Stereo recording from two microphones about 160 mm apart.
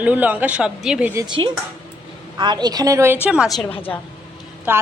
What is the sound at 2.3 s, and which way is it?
Speech, 25° right (ahead or behind).